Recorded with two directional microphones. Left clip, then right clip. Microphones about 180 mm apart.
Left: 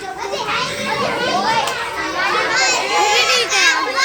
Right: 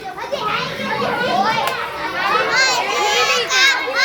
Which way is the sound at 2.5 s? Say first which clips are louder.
Even; 55° right (ahead or behind).